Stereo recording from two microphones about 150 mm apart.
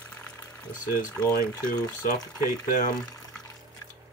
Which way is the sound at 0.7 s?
60° left (ahead or behind).